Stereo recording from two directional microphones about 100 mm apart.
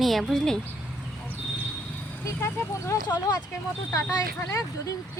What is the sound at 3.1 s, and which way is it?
Speech, 45° left (ahead or behind).